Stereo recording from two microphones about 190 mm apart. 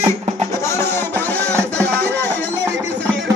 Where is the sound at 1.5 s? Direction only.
15° right (ahead or behind).